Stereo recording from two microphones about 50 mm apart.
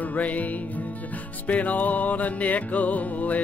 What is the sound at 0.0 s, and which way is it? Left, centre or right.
Music, left.